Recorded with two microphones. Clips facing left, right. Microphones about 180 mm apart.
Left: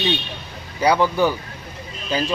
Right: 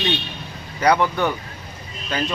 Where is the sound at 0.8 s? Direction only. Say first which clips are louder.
Left 1 dB; 5° left (ahead or behind).